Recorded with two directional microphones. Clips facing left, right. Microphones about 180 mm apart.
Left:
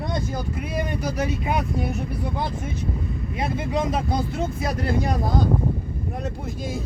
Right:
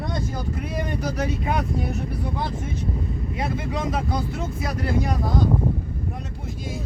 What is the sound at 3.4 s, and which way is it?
Speech, 20° left (ahead or behind).